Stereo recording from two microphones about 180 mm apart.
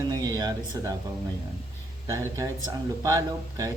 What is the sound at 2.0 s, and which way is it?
A man's voice, 20° right (ahead or behind).